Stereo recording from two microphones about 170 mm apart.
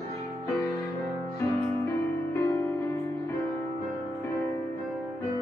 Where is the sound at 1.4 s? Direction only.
15° left (ahead or behind).